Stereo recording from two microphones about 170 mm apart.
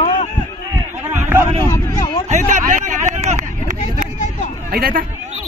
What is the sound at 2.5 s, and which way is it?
Vehicle, 45° right (ahead or behind).